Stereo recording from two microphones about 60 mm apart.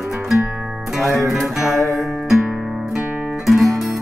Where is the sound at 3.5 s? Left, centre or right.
Centre.